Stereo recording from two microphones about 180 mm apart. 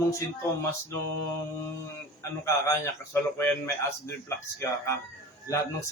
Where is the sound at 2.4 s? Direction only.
15° left (ahead or behind).